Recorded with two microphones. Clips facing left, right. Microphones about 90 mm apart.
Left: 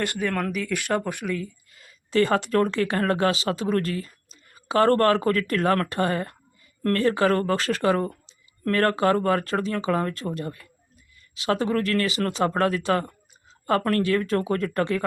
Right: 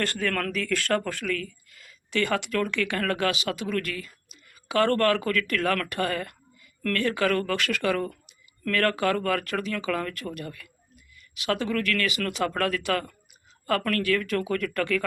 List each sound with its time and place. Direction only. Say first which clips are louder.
0.0 s speech: left 2 dB; 15° left (ahead or behind)